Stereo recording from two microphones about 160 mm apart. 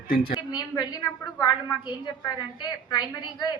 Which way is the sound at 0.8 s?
25° left (ahead or behind).